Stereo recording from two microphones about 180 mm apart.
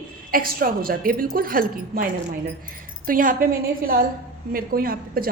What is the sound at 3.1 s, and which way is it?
A woman's voice, 50° right (ahead or behind).